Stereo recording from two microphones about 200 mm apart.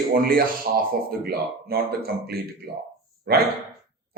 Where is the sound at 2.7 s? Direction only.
55° right (ahead or behind).